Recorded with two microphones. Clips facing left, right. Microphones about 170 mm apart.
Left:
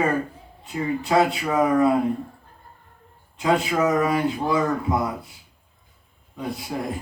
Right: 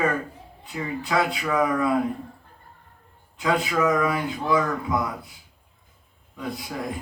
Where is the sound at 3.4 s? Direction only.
25° left (ahead or behind).